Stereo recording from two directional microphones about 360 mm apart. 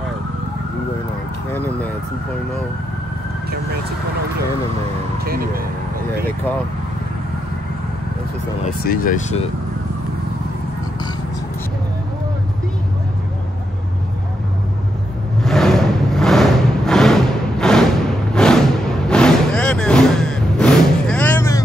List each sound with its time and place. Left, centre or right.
1.5 s speech: centre
5.2 s speech: right
8.6 s speech: left
15.4 s vehicle: centre
18.3 s a sound: centre
19.0 s vehicle: centre